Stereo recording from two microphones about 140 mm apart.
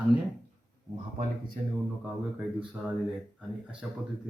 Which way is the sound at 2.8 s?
15° right (ahead or behind).